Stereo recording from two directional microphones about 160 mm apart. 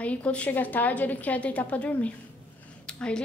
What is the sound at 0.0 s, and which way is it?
A woman's voice, 10° left (ahead or behind).